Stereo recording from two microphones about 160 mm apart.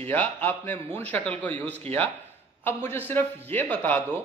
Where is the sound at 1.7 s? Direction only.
40° right (ahead or behind).